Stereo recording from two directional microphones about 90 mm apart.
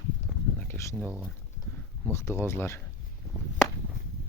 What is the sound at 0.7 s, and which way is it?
Speech, 15° left (ahead or behind).